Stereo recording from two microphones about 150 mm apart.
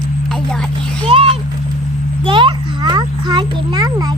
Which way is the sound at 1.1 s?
40° right (ahead or behind).